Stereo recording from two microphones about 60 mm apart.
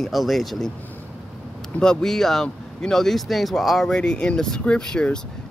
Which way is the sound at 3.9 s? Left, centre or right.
Centre.